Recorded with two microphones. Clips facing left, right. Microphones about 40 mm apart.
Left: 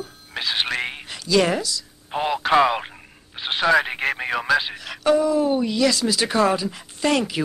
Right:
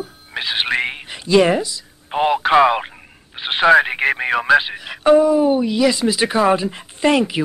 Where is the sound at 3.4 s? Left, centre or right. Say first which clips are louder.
Right 6 dB; right.